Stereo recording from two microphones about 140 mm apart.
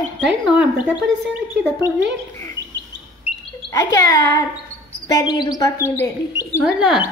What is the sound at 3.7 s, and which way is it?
A woman's voice, 25° left (ahead or behind).